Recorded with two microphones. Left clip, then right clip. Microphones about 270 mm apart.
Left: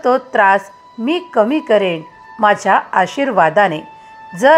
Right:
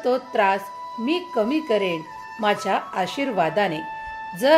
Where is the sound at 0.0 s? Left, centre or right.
Centre.